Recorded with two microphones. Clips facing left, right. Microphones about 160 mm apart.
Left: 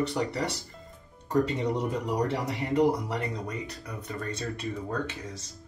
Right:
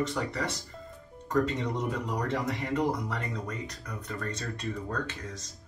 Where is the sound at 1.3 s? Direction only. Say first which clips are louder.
Left 2 dB; 10° left (ahead or behind).